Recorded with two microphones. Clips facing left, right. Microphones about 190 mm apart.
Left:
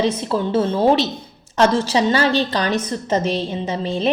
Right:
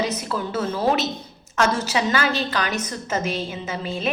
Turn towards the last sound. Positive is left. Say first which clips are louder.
# left 6 dB
turn(degrees=30)  # may be behind; listen again after turning